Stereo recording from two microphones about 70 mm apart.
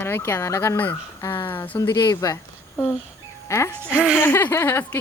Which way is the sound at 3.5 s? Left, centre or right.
Left.